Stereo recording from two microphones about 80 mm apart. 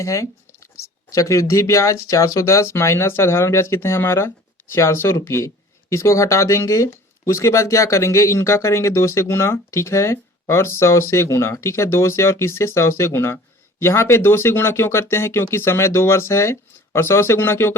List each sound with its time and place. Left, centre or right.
0.0 s speech: left